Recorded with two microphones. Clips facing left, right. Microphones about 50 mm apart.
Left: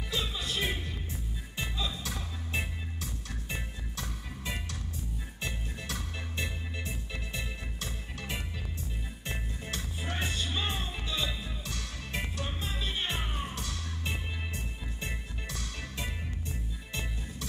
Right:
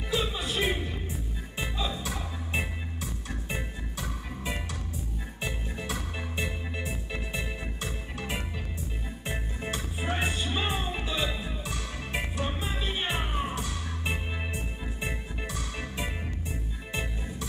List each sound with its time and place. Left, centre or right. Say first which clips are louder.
0.1 s music: right 5 dB; centre
9.9 s music: right 4 dB; right
11.1 s music: right 4 dB; centre